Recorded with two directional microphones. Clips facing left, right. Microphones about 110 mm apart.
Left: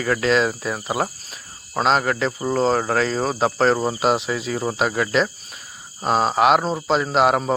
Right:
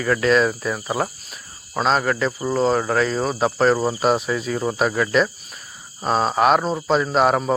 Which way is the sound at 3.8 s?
25° left (ahead or behind).